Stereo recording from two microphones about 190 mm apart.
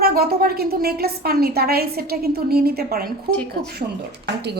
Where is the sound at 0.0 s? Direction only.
55° right (ahead or behind).